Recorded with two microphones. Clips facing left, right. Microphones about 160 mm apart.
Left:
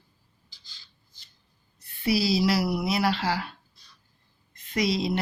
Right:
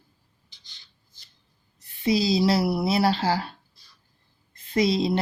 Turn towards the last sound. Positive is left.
turn(degrees=-25)  # may be behind; listen again after turning